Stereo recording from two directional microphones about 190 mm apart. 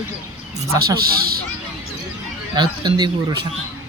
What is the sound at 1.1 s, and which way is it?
Speech, 50° right (ahead or behind).